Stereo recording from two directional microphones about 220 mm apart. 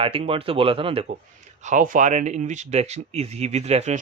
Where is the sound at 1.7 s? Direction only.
35° right (ahead or behind).